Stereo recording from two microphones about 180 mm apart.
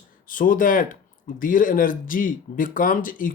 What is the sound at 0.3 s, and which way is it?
Speech, 50° left (ahead or behind).